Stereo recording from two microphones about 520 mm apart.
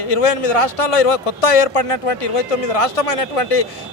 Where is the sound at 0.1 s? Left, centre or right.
Left.